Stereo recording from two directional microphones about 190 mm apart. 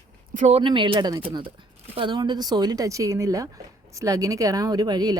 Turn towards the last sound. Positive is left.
turn(degrees=-20)  # may be behind; listen again after turning